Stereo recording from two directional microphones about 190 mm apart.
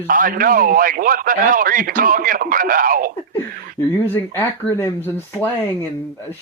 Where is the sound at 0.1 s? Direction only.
45° right (ahead or behind).